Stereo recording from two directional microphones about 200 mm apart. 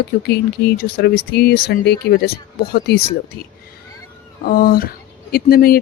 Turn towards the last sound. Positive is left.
turn(degrees=50)  # may be behind; listen again after turning